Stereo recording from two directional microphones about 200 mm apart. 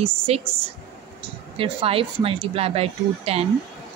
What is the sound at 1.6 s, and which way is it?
A woman's voice, 25° right (ahead or behind).